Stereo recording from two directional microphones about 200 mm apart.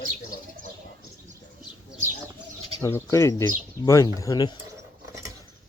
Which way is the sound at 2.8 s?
15° left (ahead or behind).